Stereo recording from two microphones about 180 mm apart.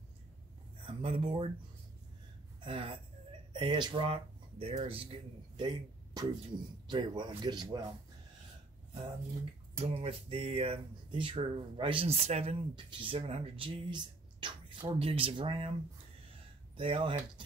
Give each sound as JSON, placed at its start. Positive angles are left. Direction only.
{"t": 0.8, "sound": "speech", "side_deg": -30}
{"t": 2.6, "sound": "a sound", "side_deg": -30}
{"t": 3.5, "sound": "speech", "side_deg": -25}
{"t": 9.8, "sound": "speech", "side_deg": -30}
{"t": 16.7, "sound": "speech", "side_deg": -30}